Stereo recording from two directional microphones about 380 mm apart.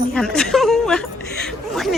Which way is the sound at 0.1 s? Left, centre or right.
Centre.